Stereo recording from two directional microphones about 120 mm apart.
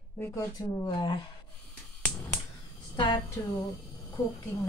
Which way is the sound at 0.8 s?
35° left (ahead or behind).